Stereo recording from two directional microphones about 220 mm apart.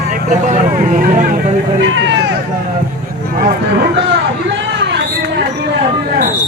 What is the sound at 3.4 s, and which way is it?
Speech, 50° right (ahead or behind).